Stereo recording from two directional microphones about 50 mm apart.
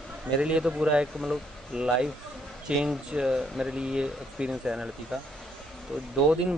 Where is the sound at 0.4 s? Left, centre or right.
Right.